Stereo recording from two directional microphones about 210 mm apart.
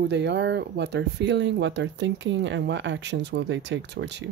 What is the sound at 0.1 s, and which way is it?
Speech, 55° right (ahead or behind).